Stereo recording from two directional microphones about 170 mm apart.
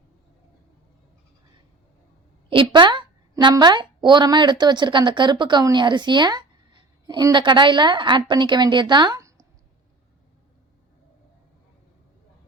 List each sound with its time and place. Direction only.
2.5 s a woman's voice: 30° right (ahead or behind)